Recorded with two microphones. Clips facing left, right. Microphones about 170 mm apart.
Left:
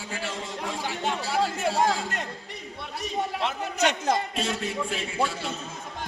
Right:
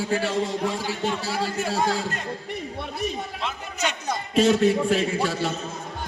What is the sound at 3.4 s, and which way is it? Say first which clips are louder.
Speech: left 4 dB; 65° left (ahead or behind).